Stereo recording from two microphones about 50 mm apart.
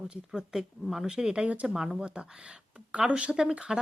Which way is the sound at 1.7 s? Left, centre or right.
Centre.